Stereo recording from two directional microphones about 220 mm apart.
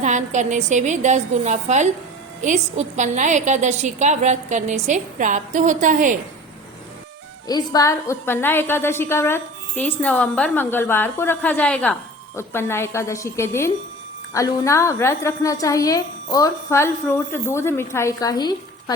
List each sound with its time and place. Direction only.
0.0 s a woman's voice: 35° right (ahead or behind)
7.4 s a woman's voice: 15° left (ahead or behind)